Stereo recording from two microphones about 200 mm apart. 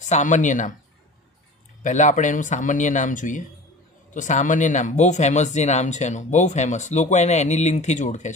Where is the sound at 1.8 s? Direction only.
40° left (ahead or behind).